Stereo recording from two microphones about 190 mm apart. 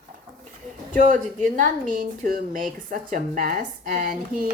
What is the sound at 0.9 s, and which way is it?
A woman's voice, 40° right (ahead or behind).